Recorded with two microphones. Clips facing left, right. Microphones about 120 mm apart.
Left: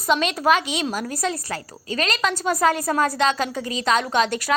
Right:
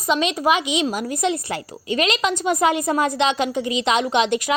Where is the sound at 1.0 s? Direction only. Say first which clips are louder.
Right 4 dB; 20° right (ahead or behind).